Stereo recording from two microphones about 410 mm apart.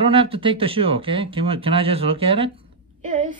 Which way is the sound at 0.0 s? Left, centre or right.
Centre.